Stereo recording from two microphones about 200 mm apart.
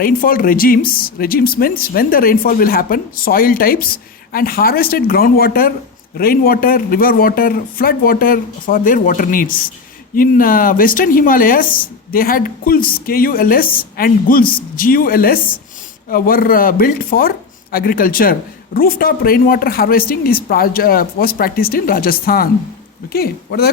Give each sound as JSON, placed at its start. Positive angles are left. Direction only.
{"t": 0.0, "sound": "speech", "side_deg": 45}